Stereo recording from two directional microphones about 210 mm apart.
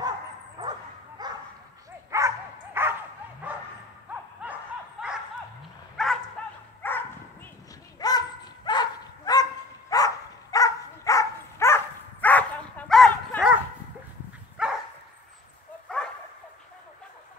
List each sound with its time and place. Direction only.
0.6 s bow-wow: 20° right (ahead or behind)
2.0 s dog: 15° right (ahead or behind)
3.4 s bow-wow: 5° right (ahead or behind)
4.1 s a sound: 5° right (ahead or behind)
5.0 s dog: 5° right (ahead or behind)
6.0 s bow-wow: centre (ahead or behind)
6.4 s dog: 5° left (ahead or behind)
14.6 s dog: 5° right (ahead or behind)